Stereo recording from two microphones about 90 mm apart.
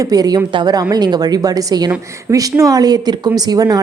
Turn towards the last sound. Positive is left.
turn(degrees=-45)  # may be behind; listen again after turning